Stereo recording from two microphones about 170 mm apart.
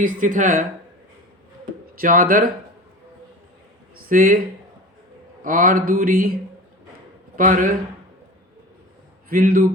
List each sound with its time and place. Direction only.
0.0 s a woman's voice: 50° right (ahead or behind)
2.0 s speech: 55° right (ahead or behind)
3.9 s speech: 55° right (ahead or behind)
7.3 s a woman's voice: 50° right (ahead or behind)
9.3 s speech: 60° right (ahead or behind)